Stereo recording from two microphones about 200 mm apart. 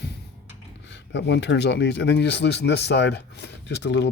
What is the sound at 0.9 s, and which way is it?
Speech, 60° left (ahead or behind).